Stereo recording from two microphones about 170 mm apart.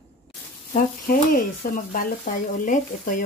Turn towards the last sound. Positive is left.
turn(degrees=50)  # may be behind; listen again after turning